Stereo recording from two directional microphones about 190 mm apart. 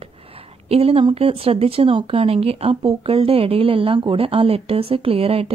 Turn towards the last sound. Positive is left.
turn(degrees=-30)  # may be behind; listen again after turning